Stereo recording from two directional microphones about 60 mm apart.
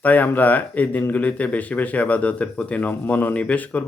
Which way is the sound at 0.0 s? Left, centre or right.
Left.